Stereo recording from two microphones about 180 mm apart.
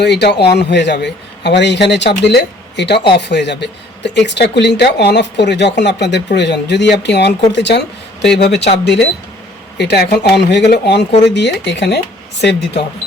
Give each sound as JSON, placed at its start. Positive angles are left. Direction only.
{"t": 0.0, "sound": "speech", "side_deg": 70}